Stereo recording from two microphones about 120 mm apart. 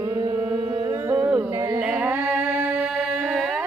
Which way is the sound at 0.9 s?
25° right (ahead or behind).